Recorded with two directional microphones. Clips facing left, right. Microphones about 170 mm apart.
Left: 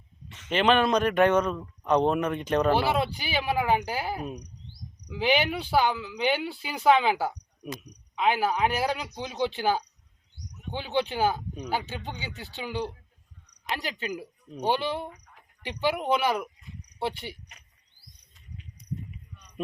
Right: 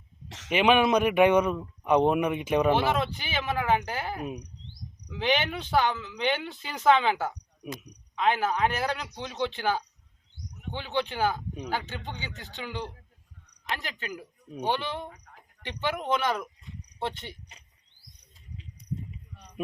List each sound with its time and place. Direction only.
0.3 s a sound: 80° right
0.5 s speech: 10° right (ahead or behind)
2.9 s speech: 10° left (ahead or behind)
4.2 s speech: 10° right (ahead or behind)
5.0 s speech: 10° left (ahead or behind)
18.5 s a sound: 30° right (ahead or behind)